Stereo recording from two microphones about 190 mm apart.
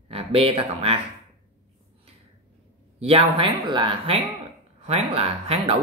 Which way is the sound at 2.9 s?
30° right (ahead or behind).